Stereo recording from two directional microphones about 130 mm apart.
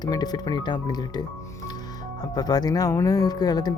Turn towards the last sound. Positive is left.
turn(degrees=30)  # may be behind; listen again after turning